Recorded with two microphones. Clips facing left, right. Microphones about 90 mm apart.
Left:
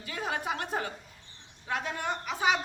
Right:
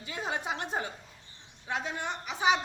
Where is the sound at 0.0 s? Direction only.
20° right (ahead or behind).